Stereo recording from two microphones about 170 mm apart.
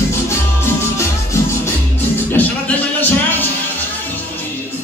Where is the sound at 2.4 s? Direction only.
10° left (ahead or behind).